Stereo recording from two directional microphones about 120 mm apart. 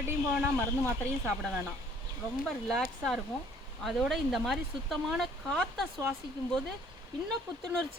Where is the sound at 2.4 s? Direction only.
Centre (ahead or behind).